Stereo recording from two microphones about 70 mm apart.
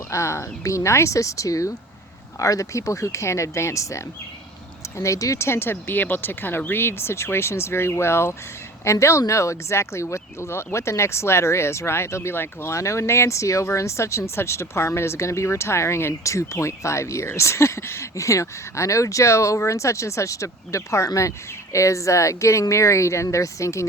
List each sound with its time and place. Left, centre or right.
0.1 s speech: left